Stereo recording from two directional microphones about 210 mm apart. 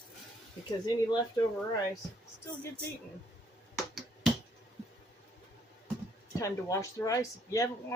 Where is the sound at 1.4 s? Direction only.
15° left (ahead or behind).